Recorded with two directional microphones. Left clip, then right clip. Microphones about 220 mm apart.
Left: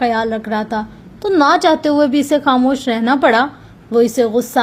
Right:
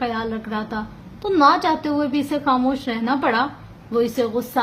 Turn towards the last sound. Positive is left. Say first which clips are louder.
# left 7 dB
turn(degrees=30)  # may be behind; listen again after turning